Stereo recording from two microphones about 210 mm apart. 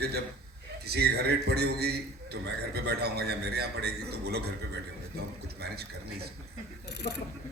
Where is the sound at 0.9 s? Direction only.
50° right (ahead or behind).